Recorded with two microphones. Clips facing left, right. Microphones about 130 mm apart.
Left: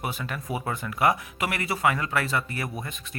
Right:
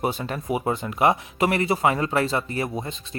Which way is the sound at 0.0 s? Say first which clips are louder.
Right 6 dB; 30° right (ahead or behind).